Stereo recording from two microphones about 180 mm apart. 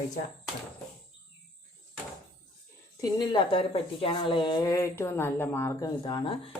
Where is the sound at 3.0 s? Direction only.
25° left (ahead or behind).